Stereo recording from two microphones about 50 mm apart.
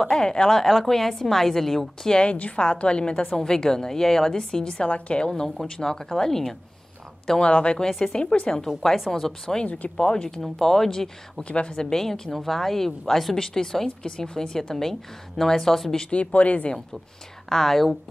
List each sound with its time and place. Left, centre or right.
0.1 s a woman's voice: centre
2.0 s a woman's voice: centre
5.3 s speech: centre
7.2 s a woman's voice: centre
7.9 s speech: centre
8.2 s a woman's voice: centre
11.4 s speech: left
16.1 s a woman's voice: left
17.5 s a woman's voice: centre